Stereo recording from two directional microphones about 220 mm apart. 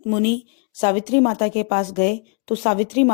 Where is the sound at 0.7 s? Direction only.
30° left (ahead or behind).